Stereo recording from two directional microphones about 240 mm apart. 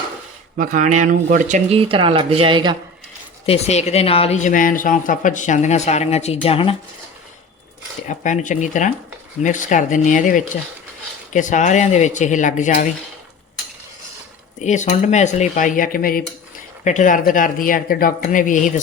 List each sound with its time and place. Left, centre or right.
0.5 s speech: right
3.4 s speech: left
8.0 s speech: left
14.6 s speech: left